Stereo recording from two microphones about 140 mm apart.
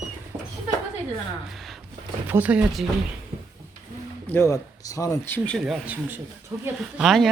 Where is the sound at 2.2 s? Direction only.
10° right (ahead or behind).